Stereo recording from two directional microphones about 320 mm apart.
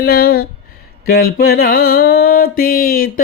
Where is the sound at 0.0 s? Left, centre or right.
Left.